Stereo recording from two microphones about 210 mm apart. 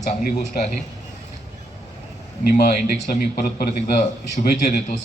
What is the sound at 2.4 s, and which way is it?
A man's voice, 45° left (ahead or behind).